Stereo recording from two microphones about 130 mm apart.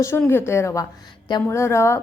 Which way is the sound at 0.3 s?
20° left (ahead or behind).